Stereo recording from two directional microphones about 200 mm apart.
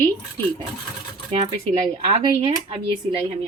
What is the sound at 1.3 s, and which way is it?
Speech, 30° right (ahead or behind).